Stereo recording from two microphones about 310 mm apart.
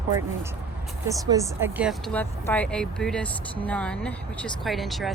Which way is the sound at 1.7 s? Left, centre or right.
Centre.